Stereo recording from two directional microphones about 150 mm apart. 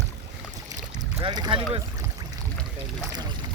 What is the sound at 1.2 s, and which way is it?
Speech, 30° right (ahead or behind).